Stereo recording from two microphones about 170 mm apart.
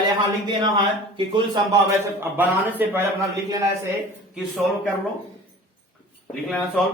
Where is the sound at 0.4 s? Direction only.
25° right (ahead or behind).